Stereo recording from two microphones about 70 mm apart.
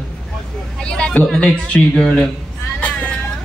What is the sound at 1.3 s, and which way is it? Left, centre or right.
Speech, centre.